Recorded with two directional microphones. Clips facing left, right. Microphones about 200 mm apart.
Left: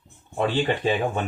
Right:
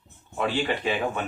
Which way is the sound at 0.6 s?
30° left (ahead or behind).